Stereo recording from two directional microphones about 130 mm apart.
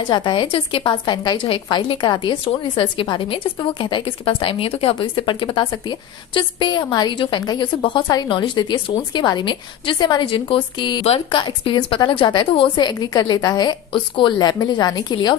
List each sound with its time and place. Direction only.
0.0 s a woman's voice: 35° left (ahead or behind)